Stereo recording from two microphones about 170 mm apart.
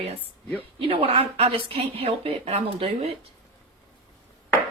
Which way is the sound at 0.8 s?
35° right (ahead or behind).